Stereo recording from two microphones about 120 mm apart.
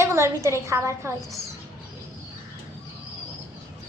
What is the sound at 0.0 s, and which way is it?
A woman's voice, 25° right (ahead or behind).